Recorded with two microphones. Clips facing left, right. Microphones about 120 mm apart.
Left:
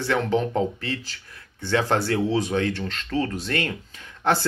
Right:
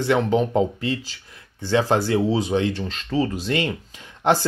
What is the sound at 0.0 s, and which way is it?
Speech, 20° right (ahead or behind).